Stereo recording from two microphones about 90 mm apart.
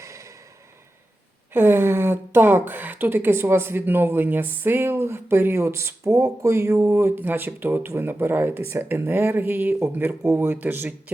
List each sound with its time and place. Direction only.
1.5 s speech: 25° right (ahead or behind)